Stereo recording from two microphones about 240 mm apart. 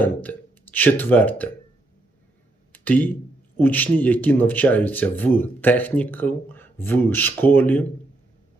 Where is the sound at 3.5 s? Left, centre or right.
Centre.